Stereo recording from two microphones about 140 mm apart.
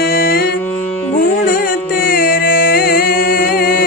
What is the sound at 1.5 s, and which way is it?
Music, 90° left.